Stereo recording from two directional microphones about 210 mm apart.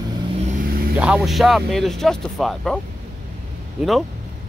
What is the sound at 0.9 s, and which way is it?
Speech, 5° right (ahead or behind).